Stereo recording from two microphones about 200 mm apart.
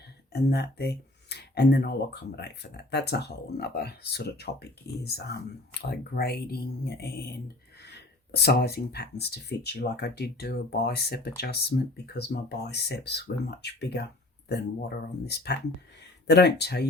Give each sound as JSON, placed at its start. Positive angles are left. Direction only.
{"t": 0.3, "sound": "speech", "side_deg": 55}